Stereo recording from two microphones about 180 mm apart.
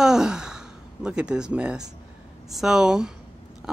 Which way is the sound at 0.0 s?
5° right (ahead or behind).